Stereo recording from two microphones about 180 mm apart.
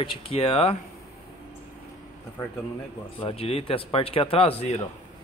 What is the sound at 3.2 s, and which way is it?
Speech, 30° left (ahead or behind).